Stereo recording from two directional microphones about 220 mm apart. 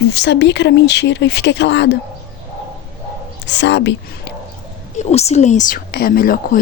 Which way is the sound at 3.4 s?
50° left (ahead or behind).